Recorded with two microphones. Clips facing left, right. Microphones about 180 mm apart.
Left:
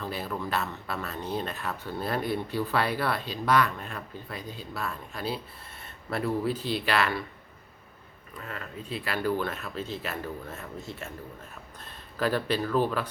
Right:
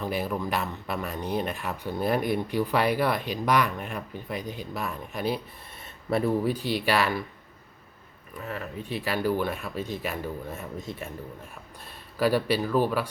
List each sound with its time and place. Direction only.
0.0 s speech: 15° right (ahead or behind)
8.4 s speech: 15° right (ahead or behind)
12.1 s speech: 10° right (ahead or behind)